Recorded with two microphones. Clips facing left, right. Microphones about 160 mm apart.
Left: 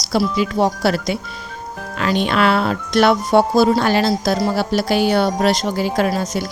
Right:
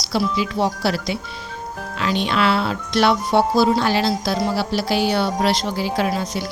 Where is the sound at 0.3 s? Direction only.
50° left (ahead or behind).